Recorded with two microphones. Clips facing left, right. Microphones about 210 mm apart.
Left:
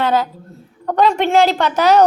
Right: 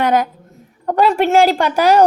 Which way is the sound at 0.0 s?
15° right (ahead or behind).